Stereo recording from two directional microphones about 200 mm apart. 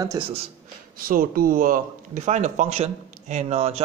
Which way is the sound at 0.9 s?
45° right (ahead or behind).